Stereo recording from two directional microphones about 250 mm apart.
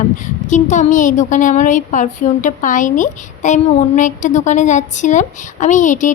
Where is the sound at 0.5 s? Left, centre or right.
Left.